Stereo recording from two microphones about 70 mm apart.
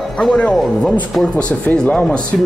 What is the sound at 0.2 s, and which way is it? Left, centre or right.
Speech, centre.